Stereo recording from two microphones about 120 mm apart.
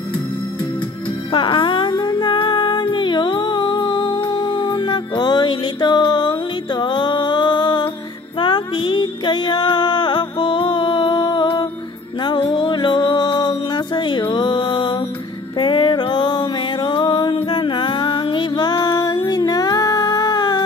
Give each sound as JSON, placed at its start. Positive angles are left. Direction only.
{"t": 1.3, "sound": "music", "side_deg": 45}